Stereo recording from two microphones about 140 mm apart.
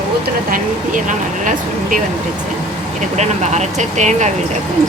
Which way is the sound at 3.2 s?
55° right (ahead or behind).